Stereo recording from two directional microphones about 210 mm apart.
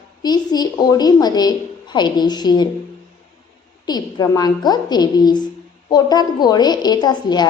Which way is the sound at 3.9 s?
20° left (ahead or behind).